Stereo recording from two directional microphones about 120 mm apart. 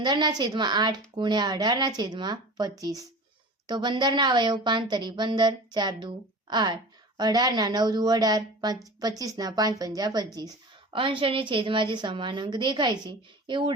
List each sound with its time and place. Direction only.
0.0 s a woman's voice: 35° right (ahead or behind)
10.9 s a woman's voice: 45° right (ahead or behind)